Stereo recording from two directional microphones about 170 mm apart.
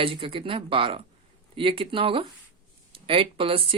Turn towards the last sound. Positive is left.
turn(degrees=-30)  # may be behind; listen again after turning